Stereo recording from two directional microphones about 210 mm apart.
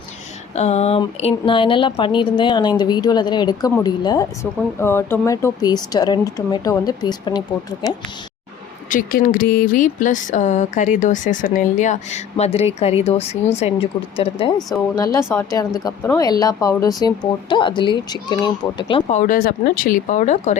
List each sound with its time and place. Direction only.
0.5 s speech: 30° left (ahead or behind)
8.9 s speech: 40° left (ahead or behind)
14.9 s speech: 15° left (ahead or behind)
19.2 s speech: 40° left (ahead or behind)